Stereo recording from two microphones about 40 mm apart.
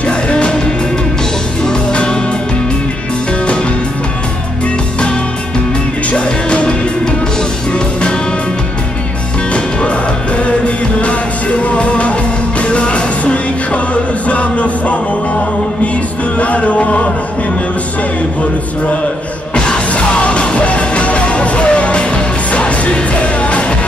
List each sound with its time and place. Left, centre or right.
0.0 s music: left
1.7 s music: left
6.1 s music: left
9.5 s music: left
16.3 s music: left
19.5 s music: left